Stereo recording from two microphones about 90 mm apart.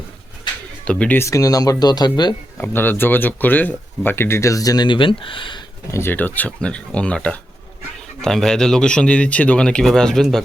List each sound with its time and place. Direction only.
0.9 s speech: 15° left (ahead or behind)
1.2 s speech: 40° left (ahead or behind)
2.6 s speech: 20° left (ahead or behind); by 4.9 s 45° left (ahead or behind)
4.9 s speech: 70° left (ahead or behind)
5.9 s speech: 25° left (ahead or behind); by 10.4 s 5° left (ahead or behind)